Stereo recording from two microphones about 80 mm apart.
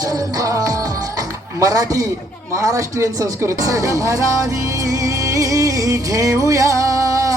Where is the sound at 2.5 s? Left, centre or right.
Right.